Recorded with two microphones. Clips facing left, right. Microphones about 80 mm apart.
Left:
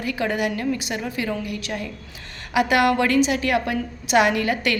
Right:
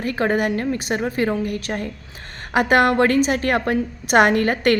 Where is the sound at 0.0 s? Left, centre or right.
Right.